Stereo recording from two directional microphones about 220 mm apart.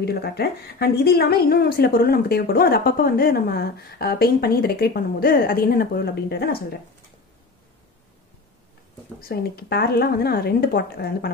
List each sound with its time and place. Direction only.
0.0 s a woman's voice: 45° left (ahead or behind)
9.2 s a woman's voice: 45° left (ahead or behind)